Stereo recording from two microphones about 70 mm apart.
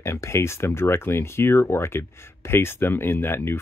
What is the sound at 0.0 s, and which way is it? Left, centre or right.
Speech, left.